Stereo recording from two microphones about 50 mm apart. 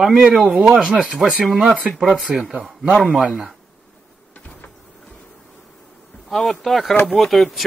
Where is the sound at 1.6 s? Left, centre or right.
Right.